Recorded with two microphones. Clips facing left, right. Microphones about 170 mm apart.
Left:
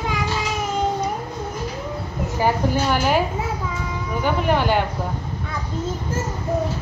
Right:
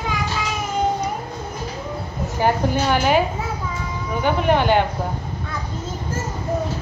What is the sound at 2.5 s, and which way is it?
Speech, 5° left (ahead or behind).